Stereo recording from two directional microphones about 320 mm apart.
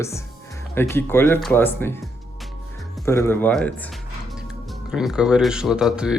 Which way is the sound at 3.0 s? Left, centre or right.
Centre.